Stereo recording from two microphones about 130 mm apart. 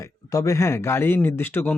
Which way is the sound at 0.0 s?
25° left (ahead or behind).